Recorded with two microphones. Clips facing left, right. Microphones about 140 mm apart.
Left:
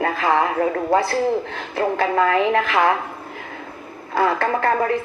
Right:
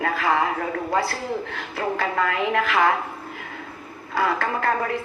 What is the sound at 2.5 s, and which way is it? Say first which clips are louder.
Speech: left 3 dB; 55° left (ahead or behind).